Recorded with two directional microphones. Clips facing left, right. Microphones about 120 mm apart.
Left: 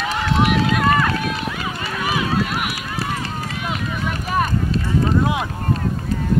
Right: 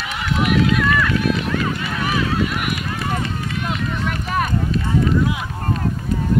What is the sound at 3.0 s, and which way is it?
Run, 35° left (ahead or behind).